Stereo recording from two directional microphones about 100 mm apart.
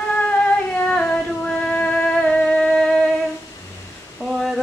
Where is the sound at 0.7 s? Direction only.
10° left (ahead or behind).